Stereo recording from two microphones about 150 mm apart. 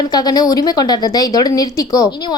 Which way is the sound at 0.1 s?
25° left (ahead or behind).